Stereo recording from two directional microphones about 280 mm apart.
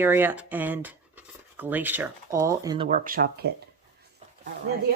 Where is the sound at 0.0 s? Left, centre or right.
Centre; by 3.2 s right.